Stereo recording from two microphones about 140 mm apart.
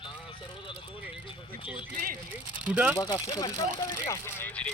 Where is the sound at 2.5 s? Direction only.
10° right (ahead or behind).